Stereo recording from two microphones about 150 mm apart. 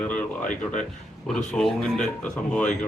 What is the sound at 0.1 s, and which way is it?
Speech, 60° left (ahead or behind).